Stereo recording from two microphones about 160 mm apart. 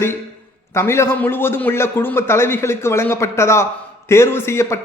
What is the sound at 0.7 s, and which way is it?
A man's voice, 15° left (ahead or behind).